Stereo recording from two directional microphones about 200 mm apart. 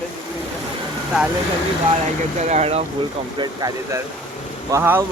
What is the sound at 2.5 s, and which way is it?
Speech, 30° right (ahead or behind).